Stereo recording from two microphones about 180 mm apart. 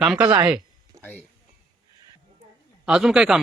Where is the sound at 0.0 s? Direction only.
5° right (ahead or behind).